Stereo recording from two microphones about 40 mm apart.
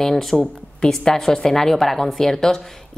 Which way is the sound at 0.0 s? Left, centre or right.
Centre.